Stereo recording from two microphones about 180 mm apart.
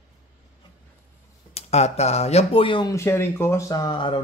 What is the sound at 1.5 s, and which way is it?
Speech, 35° left (ahead or behind).